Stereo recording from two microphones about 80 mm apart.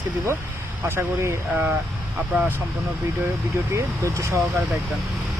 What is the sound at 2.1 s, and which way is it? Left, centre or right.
Speech, right.